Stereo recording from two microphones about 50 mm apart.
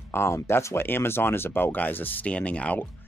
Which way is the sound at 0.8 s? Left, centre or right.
Left.